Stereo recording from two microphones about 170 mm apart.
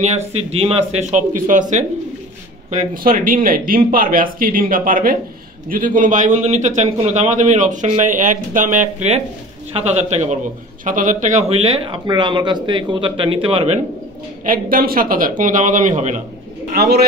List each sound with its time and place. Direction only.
0.5 s a man's voice: 35° right (ahead or behind)
14.4 s a man's voice: 55° right (ahead or behind)
16.7 s a man's voice: 65° right (ahead or behind)